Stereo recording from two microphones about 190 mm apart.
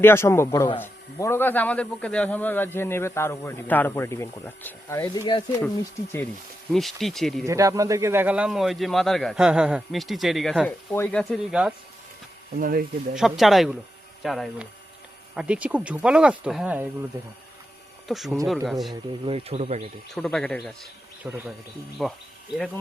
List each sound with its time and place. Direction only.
0.0 s speech: 15° left (ahead or behind)
6.7 s a man's voice: centre (ahead or behind)
7.4 s a man's voice: 15° right (ahead or behind)
10.7 s a man's voice: 10° left (ahead or behind)
12.5 s speech: 45° right (ahead or behind)
13.1 s a man's voice: centre (ahead or behind)
18.1 s a man's voice: centre (ahead or behind)
19.2 s speech: 30° right (ahead or behind)
20.1 s a man's voice: centre (ahead or behind)